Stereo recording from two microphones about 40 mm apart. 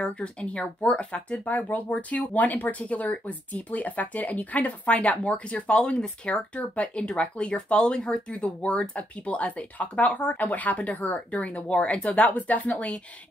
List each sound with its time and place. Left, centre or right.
0.0 s speech: left
6.3 s speech: left
11.6 s speech: left